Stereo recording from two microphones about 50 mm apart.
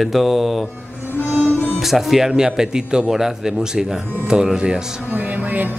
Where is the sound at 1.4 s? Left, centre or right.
Left.